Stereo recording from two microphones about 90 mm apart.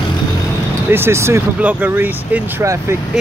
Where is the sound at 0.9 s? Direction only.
30° right (ahead or behind).